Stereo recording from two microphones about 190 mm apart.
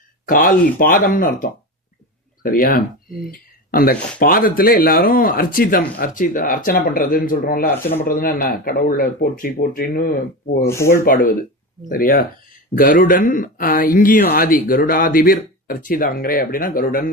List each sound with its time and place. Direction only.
0.3 s speech: 45° left (ahead or behind)
10.6 s speech: 15° left (ahead or behind)
11.0 s speech: 45° left (ahead or behind)